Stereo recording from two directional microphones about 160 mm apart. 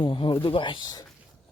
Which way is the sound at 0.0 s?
30° left (ahead or behind).